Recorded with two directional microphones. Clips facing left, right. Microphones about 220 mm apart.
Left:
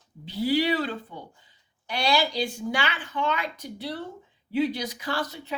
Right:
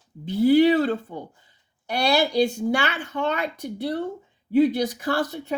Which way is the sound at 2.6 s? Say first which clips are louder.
Right 5 dB; 45° right (ahead or behind).